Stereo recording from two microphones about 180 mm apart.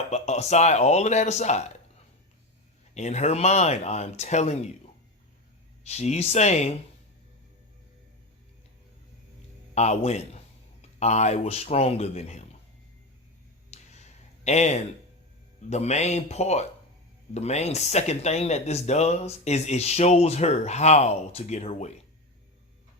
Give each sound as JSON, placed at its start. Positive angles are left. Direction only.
{"t": 0.1, "sound": "speech", "side_deg": 40}
{"t": 2.9, "sound": "speech", "side_deg": 40}
{"t": 5.8, "sound": "speech", "side_deg": 35}
{"t": 9.7, "sound": "a man's voice", "side_deg": 40}
{"t": 13.7, "sound": "a sound", "side_deg": 40}
{"t": 15.7, "sound": "speech", "side_deg": 35}